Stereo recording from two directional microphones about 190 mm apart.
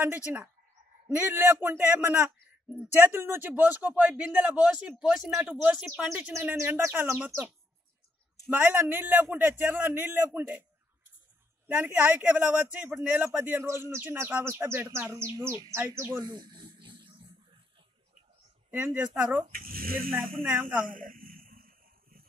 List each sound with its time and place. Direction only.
0.0 s speech: 10° right (ahead or behind)
11.6 s speech: 10° right (ahead or behind); by 17.3 s 25° right (ahead or behind)
18.7 s speech: 10° right (ahead or behind)
19.4 s speech: 50° right (ahead or behind)
20.4 s speech: 5° right (ahead or behind)
20.8 s a sound: 45° right (ahead or behind)